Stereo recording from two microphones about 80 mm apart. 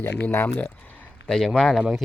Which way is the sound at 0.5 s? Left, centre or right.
Centre.